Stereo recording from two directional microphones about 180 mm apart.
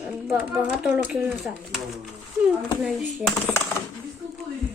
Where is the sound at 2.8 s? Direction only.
Centre (ahead or behind).